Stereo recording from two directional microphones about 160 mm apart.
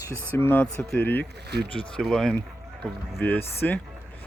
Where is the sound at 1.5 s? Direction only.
90° right.